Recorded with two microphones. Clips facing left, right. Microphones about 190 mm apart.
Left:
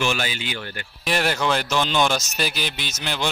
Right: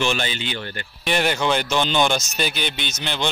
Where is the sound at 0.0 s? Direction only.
5° left (ahead or behind).